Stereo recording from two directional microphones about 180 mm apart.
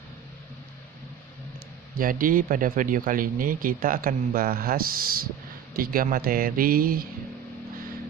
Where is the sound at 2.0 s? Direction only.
50° right (ahead or behind).